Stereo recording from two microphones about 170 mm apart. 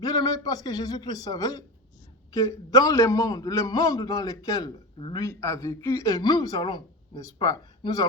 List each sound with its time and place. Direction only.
0.0 s a man's voice: 20° left (ahead or behind)